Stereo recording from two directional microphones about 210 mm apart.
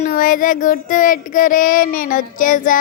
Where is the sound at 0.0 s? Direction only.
40° left (ahead or behind).